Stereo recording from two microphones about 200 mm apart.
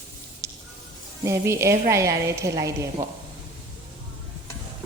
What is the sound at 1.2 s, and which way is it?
A woman's voice, 15° right (ahead or behind).